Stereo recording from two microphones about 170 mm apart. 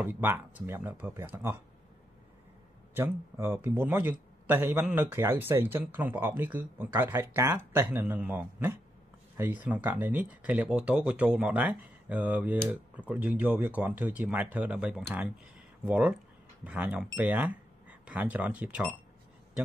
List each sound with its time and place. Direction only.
0.0 s speech: 10° right (ahead or behind)
2.9 s speech: 15° right (ahead or behind)